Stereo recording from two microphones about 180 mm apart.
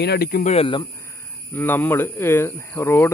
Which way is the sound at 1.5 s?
10° left (ahead or behind).